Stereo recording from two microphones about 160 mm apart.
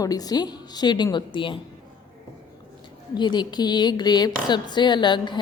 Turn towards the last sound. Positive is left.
turn(degrees=30)  # may be behind; listen again after turning